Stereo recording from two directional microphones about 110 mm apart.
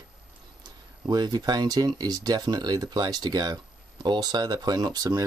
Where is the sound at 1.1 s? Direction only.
40° right (ahead or behind).